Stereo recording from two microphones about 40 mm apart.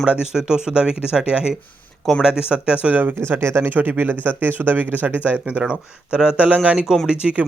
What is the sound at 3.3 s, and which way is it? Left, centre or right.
Speech, right.